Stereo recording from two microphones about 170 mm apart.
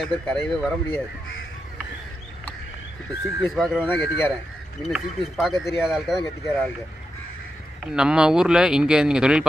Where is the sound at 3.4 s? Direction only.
Centre (ahead or behind).